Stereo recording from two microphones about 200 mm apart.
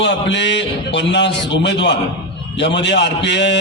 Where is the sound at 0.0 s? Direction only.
60° left (ahead or behind).